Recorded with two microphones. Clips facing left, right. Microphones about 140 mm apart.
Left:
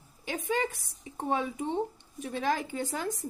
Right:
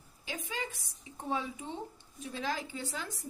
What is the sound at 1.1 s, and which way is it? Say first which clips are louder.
A woman's voice: left 5 dB; 55° left (ahead or behind).